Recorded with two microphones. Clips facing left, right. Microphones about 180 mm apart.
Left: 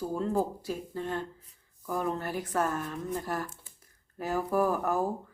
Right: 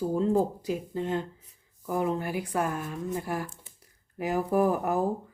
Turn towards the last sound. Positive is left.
turn(degrees=-15)  # may be behind; listen again after turning